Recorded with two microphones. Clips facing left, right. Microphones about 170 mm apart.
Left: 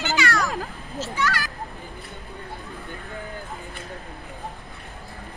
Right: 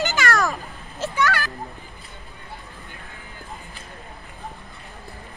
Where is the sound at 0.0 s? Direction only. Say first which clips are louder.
Right 2 dB; 45° right (ahead or behind).